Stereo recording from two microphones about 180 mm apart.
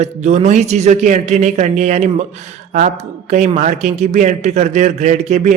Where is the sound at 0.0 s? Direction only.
40° right (ahead or behind).